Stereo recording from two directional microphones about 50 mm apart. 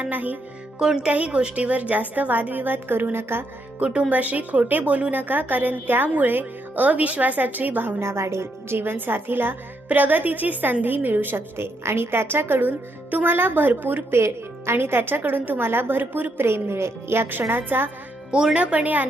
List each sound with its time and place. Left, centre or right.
0.0 s a woman's voice: right
0.8 s a woman's voice: centre; by 3.4 s right
3.8 s a woman's voice: right
8.0 s a woman's voice: right
8.8 s a woman's voice: right
14.2 s a woman's voice: right
16.5 s a woman's voice: right
18.3 s speech: centre
18.5 s a woman's voice: right